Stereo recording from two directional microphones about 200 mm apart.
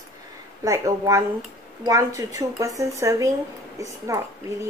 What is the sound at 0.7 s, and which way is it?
A woman's voice, 15° right (ahead or behind).